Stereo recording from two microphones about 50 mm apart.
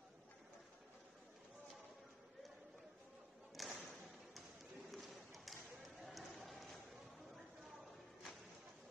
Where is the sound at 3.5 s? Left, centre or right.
Centre.